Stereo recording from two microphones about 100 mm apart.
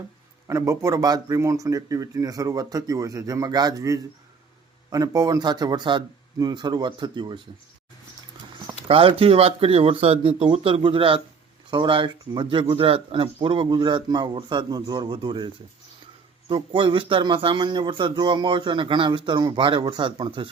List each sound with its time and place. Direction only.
0.4 s speech: 30° right (ahead or behind); by 7.4 s 50° right (ahead or behind)
8.9 s a man's voice: 70° right (ahead or behind)